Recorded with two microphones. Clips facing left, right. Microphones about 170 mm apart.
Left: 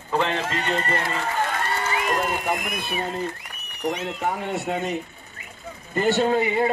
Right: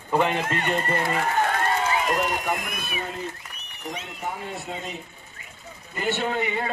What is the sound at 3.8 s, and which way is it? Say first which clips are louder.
Speech: left 8 dB; 70° left (ahead or behind).